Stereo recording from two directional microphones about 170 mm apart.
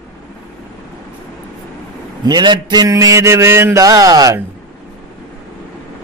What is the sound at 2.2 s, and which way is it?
A man's voice, 25° right (ahead or behind).